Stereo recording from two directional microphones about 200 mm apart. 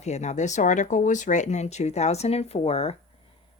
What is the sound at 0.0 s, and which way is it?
Speech, 35° left (ahead or behind).